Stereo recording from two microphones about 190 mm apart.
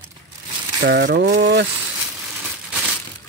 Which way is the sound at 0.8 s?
65° right (ahead or behind).